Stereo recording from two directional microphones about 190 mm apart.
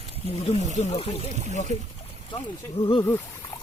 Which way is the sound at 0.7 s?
30° left (ahead or behind).